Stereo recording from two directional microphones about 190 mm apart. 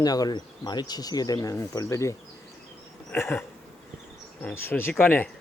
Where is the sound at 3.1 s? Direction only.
10° left (ahead or behind).